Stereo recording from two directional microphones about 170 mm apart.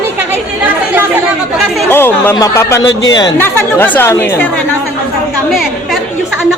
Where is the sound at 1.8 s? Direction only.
10° left (ahead or behind).